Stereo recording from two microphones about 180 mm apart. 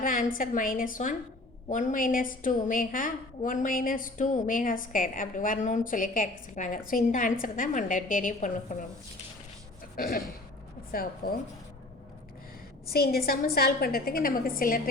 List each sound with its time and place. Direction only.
0.0 s a woman's voice: 50° left (ahead or behind)
9.9 s a woman's voice: 55° left (ahead or behind)
12.9 s a woman's voice: 55° left (ahead or behind)